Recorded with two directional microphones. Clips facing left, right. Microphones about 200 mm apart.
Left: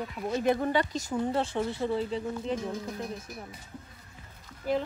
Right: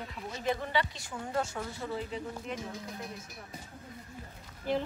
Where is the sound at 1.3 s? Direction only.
30° left (ahead or behind).